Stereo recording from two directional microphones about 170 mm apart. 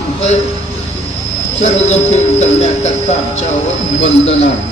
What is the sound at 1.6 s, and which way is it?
Speech, 45° left (ahead or behind).